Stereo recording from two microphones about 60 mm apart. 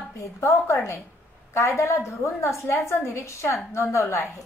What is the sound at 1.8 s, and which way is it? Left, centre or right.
A woman's voice, left.